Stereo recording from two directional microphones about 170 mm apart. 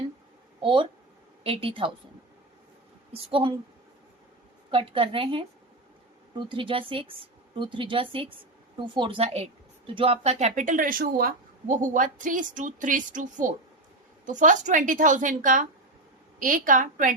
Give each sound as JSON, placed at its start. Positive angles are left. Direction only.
{"t": 0.6, "sound": "speech", "side_deg": -30}
{"t": 3.1, "sound": "speech", "side_deg": -35}
{"t": 4.7, "sound": "speech", "side_deg": -30}
{"t": 6.5, "sound": "speech", "side_deg": -30}